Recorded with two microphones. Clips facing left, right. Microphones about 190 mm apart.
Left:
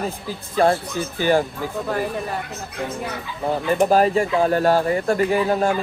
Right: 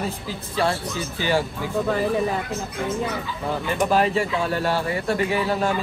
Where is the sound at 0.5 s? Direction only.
55° left (ahead or behind).